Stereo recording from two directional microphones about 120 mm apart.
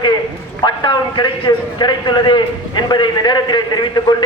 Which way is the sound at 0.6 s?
40° left (ahead or behind).